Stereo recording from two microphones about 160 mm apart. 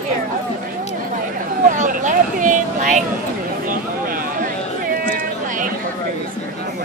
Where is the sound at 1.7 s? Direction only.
55° right (ahead or behind).